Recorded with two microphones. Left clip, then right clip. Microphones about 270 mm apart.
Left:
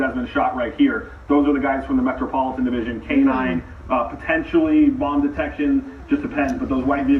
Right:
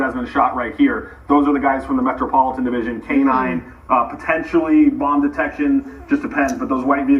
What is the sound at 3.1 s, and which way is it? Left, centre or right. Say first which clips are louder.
A man's voice: right 2 dB; centre.